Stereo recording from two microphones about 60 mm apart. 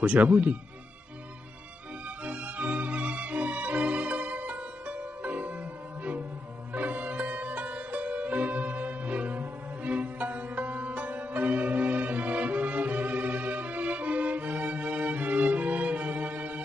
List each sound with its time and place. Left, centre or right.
0.0 s speech: right
2.2 s music: right
6.7 s music: right